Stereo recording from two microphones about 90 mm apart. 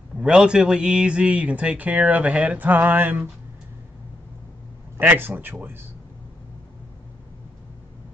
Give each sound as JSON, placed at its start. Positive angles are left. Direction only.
{"t": 0.2, "sound": "speech", "side_deg": -10}
{"t": 4.9, "sound": "a man's voice", "side_deg": -25}